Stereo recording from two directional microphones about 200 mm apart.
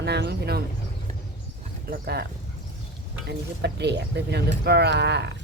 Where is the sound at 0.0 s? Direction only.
55° right (ahead or behind).